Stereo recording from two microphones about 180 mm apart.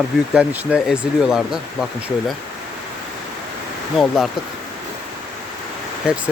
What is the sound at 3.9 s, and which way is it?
Speech, 5° left (ahead or behind).